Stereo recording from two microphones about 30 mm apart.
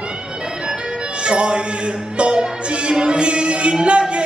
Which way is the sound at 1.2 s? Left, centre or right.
Right.